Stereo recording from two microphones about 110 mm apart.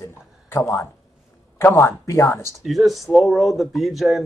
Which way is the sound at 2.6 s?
Centre (ahead or behind).